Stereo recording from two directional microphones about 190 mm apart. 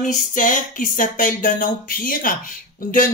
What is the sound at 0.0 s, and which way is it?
Speech, 45° left (ahead or behind).